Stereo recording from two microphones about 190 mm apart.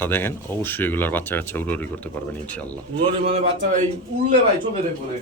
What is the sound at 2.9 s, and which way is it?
Speech, 30° right (ahead or behind).